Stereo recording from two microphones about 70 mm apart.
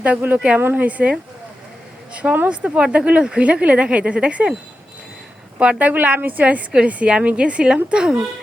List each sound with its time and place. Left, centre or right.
0.3 s a woman's voice: centre
2.1 s speech: right
5.5 s a woman's voice: centre